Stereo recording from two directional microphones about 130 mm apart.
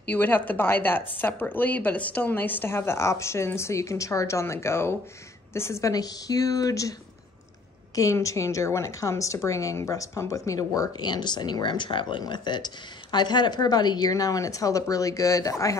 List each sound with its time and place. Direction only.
0.1 s a woman's voice: 15° left (ahead or behind)